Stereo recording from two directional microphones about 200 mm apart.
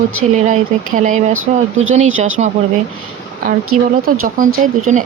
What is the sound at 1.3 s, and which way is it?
Speech, 90° right.